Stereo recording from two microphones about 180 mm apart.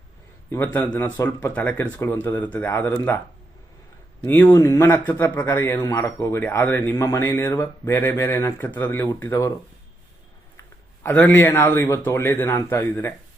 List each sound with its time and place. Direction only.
0.5 s a man's voice: 15° left (ahead or behind)
4.3 s a man's voice: 15° left (ahead or behind)
11.0 s a man's voice: 10° left (ahead or behind)